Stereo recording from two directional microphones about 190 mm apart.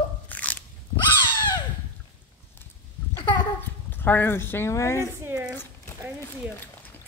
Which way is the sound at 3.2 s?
25° left (ahead or behind).